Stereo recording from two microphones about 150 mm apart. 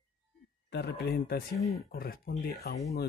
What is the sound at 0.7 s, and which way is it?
Speech, 90° left.